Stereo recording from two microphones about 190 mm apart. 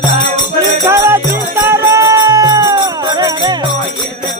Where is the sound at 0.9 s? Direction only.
15° right (ahead or behind).